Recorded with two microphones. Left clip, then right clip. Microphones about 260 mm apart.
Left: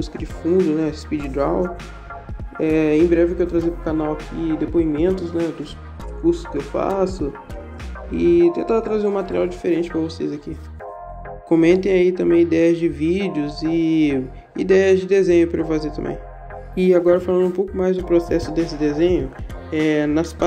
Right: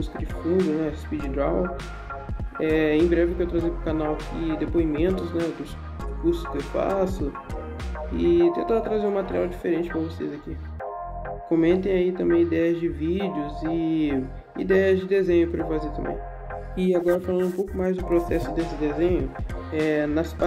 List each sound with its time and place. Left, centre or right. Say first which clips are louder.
0.0 s speech: left 5 dB; centre
2.6 s speech: left 4 dB; centre
11.4 s speech: left 6 dB; centre
16.7 s speech: left 8 dB; left
17.0 s speech: left 7 dB; centre